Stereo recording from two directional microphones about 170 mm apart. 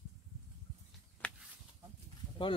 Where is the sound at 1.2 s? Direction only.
5° left (ahead or behind).